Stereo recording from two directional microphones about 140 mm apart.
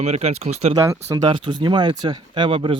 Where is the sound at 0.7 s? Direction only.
20° right (ahead or behind).